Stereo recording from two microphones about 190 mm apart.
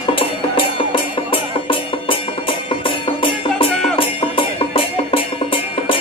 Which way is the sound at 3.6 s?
30° left (ahead or behind).